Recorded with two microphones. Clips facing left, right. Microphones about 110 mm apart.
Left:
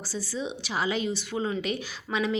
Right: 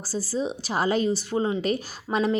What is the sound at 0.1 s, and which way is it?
A woman's voice, 40° right (ahead or behind).